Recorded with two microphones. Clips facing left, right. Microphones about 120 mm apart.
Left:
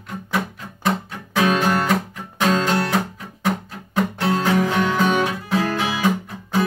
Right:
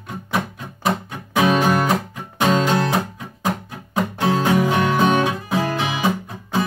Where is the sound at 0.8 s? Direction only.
15° right (ahead or behind).